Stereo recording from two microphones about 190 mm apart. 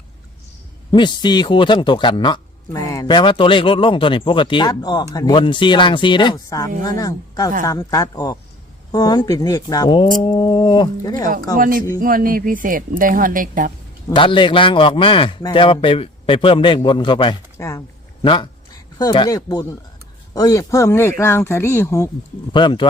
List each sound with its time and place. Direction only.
0.9 s a man's voice: 25° left (ahead or behind)
11.5 s speech: 45° right (ahead or behind)
14.1 s a man's voice: 25° left (ahead or behind)
22.5 s a man's voice: 25° left (ahead or behind)